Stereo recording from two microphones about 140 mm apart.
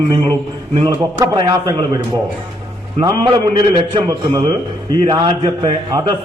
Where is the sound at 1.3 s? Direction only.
30° right (ahead or behind).